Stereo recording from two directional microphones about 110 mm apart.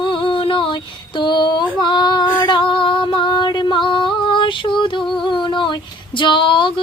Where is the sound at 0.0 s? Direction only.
50° left (ahead or behind).